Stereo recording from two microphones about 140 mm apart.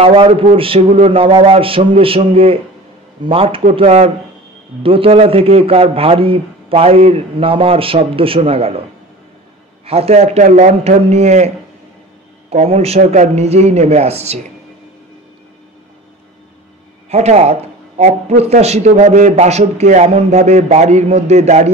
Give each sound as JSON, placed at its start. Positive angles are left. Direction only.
{"t": 0.0, "sound": "a man's voice", "side_deg": -40}
{"t": 9.8, "sound": "speech", "side_deg": -45}
{"t": 17.1, "sound": "speech", "side_deg": -50}